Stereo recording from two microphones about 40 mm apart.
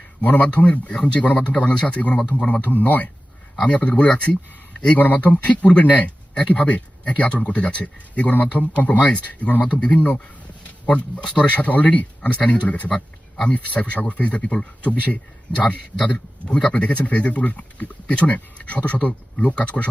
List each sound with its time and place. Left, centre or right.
0.2 s speech: left
2.7 s speech: left
4.9 s speech: left
11.2 s speech: left
16.8 s speech: left